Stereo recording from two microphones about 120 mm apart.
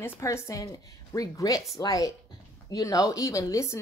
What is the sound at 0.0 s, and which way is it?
A woman's voice, 25° left (ahead or behind).